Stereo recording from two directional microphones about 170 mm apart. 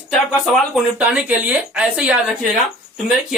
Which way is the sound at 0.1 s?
Centre (ahead or behind).